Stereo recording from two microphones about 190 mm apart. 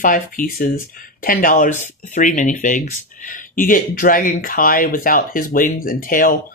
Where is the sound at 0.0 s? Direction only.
45° left (ahead or behind).